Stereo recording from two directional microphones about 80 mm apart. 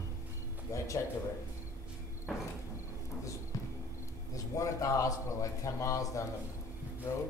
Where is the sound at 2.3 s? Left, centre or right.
Centre.